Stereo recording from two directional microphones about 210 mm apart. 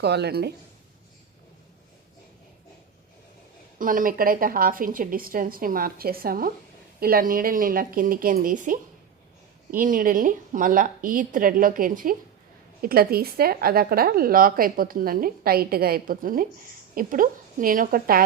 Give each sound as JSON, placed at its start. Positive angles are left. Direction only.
{"t": 0.0, "sound": "speech", "side_deg": -50}
{"t": 3.8, "sound": "a woman's voice", "side_deg": -40}